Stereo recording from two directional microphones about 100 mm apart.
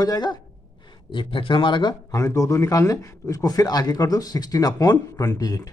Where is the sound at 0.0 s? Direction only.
40° left (ahead or behind).